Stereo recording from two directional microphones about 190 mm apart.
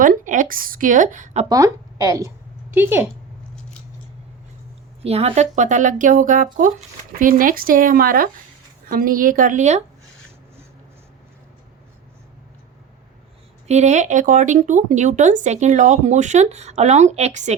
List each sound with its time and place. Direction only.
0.0 s speech: 45° right (ahead or behind)
1.5 s a woman's voice: 20° right (ahead or behind)
5.0 s speech: 35° right (ahead or behind)
13.7 s speech: 35° right (ahead or behind)